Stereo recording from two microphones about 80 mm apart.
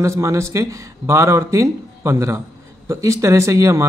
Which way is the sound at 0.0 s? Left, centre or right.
Right.